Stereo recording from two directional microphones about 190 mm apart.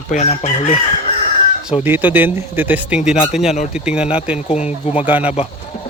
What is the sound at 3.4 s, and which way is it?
Speech, 35° left (ahead or behind).